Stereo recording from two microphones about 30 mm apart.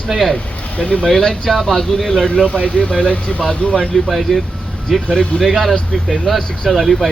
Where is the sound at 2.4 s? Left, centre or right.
Left.